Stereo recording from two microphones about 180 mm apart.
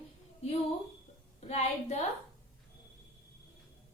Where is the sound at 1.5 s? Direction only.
35° left (ahead or behind).